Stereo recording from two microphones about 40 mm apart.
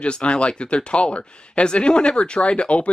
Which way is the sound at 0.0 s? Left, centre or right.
Left.